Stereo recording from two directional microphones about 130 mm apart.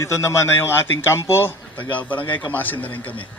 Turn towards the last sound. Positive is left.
turn(degrees=15)  # may be behind; listen again after turning